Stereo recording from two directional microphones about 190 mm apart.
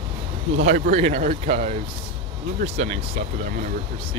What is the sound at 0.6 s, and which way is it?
Speech, 35° right (ahead or behind).